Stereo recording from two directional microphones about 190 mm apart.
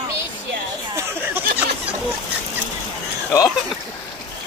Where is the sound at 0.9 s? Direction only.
10° right (ahead or behind).